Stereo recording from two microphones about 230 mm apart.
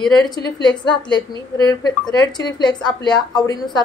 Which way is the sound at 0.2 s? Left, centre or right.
Centre.